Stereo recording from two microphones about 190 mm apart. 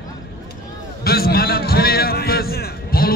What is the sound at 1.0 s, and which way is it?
A man's voice, 55° left (ahead or behind).